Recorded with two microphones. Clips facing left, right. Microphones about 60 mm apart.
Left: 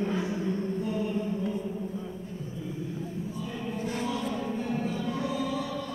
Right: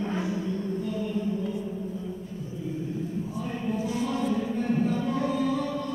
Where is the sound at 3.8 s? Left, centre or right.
Left.